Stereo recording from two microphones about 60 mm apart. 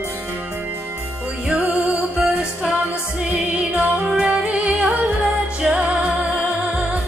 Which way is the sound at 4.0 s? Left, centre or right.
Centre.